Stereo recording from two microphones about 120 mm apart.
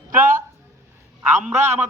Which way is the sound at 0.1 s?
90° right.